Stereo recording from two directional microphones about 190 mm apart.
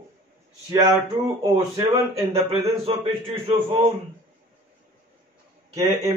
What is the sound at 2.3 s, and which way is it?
A man's voice, 30° right (ahead or behind).